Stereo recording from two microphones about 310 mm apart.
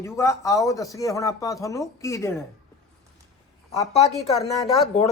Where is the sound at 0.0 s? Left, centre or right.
Centre.